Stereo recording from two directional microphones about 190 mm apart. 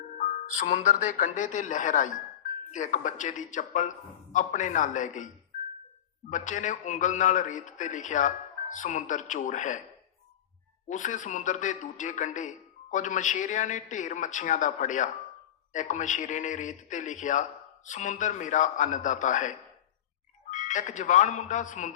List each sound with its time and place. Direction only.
0.2 s a man's voice: 40° left (ahead or behind)
6.3 s a man's voice: 40° left (ahead or behind)
10.8 s a man's voice: 40° left (ahead or behind)